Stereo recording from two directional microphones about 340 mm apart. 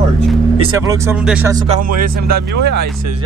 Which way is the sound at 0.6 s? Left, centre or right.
Centre.